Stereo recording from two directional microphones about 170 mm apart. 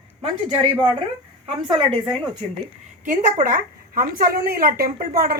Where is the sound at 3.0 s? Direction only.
45° right (ahead or behind).